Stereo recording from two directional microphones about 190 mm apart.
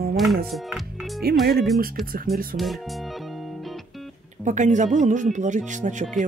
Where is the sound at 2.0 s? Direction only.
50° right (ahead or behind).